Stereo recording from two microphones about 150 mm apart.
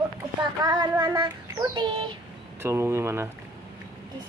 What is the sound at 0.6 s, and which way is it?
Child singing, 30° right (ahead or behind).